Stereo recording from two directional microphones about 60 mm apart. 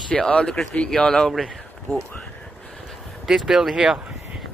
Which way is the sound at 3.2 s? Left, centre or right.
Centre.